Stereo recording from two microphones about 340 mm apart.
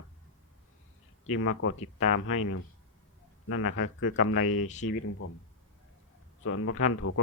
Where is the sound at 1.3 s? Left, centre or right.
Left.